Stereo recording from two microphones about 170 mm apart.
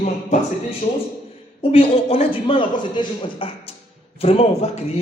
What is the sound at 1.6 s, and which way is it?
A man's voice, 35° left (ahead or behind).